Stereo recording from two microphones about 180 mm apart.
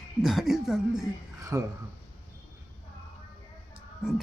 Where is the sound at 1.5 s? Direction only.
15° right (ahead or behind).